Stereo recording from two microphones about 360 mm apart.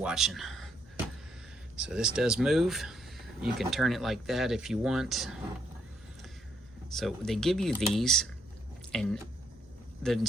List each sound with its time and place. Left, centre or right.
0.0 s speech: centre
1.7 s speech: centre
6.9 s speech: centre